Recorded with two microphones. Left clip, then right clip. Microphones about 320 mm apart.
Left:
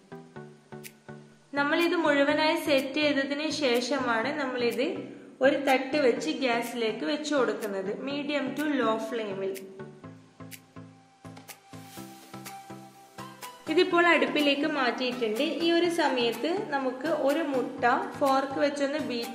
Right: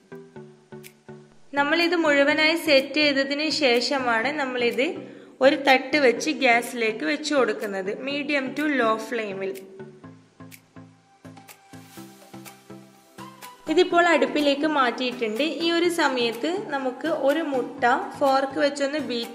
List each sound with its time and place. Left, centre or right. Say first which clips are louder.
1.5 s a woman's voice: right 4 dB; centre
13.7 s a woman's voice: right 4 dB; centre